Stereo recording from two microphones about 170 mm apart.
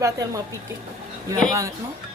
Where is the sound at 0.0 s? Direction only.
20° right (ahead or behind).